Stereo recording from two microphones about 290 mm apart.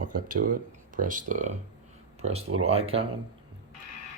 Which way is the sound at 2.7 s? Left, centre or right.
Centre.